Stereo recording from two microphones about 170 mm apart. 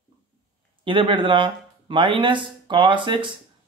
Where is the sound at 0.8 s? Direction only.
30° right (ahead or behind).